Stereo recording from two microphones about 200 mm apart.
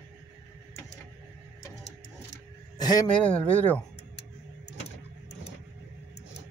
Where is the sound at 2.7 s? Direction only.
20° left (ahead or behind).